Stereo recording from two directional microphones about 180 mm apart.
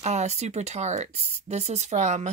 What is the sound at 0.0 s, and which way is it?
Speech, 40° right (ahead or behind).